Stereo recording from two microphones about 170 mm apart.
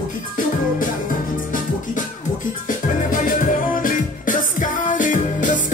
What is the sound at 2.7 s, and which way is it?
Music, 50° left (ahead or behind).